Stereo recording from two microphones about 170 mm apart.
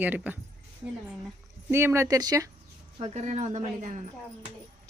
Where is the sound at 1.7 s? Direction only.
15° right (ahead or behind).